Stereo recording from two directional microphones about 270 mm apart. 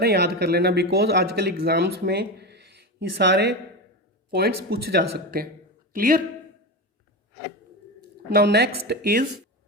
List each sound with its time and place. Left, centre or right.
0.0 s speech: right
8.3 s speech: right